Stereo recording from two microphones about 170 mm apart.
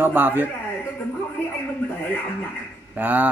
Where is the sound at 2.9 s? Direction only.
10° right (ahead or behind).